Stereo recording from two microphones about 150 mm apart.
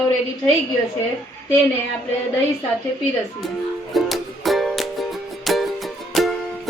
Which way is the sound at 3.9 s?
Centre (ahead or behind).